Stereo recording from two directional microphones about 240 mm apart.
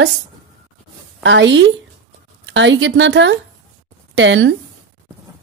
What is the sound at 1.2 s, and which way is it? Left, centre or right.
Speech, right.